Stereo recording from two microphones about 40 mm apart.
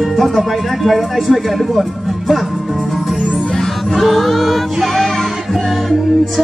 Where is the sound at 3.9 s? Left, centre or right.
Centre.